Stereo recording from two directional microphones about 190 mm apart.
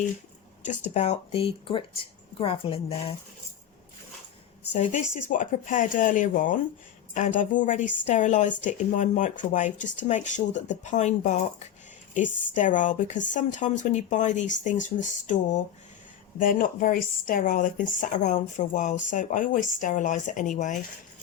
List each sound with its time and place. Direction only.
0.9 s speech: 35° left (ahead or behind)
4.7 s a woman's voice: 40° left (ahead or behind)